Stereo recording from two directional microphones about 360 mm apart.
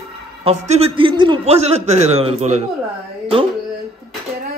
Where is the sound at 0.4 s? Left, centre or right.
Centre.